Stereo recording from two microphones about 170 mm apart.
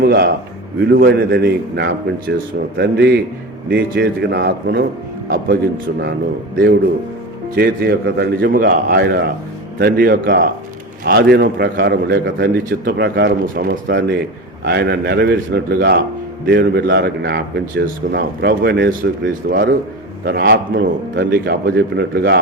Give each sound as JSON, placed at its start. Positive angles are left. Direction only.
{"t": 0.0, "sound": "a man's voice", "side_deg": -60}
{"t": 0.8, "sound": "a man's voice", "side_deg": -75}
{"t": 7.5, "sound": "a man's voice", "side_deg": -65}